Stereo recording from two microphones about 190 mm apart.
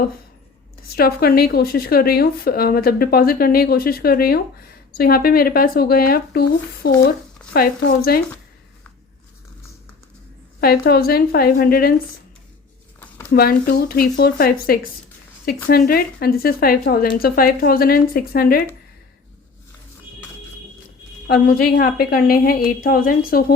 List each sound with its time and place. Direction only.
0.8 s speech: 55° left (ahead or behind)
10.6 s speech: 55° left (ahead or behind)
13.3 s speech: 55° left (ahead or behind)
21.2 s speech: 55° left (ahead or behind)